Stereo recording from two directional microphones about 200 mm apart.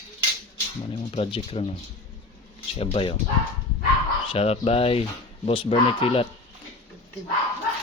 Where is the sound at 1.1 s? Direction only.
30° left (ahead or behind).